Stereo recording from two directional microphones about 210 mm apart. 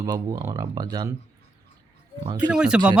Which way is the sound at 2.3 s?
5° right (ahead or behind).